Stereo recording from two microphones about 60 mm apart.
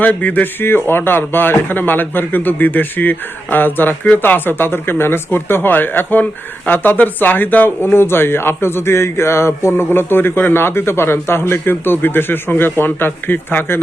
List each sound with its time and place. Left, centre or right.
0.0 s speech: left
0.6 s speech: left